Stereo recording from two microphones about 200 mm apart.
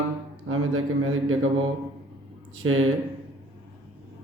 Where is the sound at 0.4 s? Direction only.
90° right.